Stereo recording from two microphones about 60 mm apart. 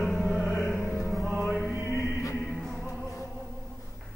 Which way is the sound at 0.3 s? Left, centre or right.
Centre.